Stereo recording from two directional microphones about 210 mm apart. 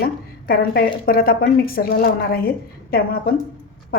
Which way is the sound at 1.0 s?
45° left (ahead or behind).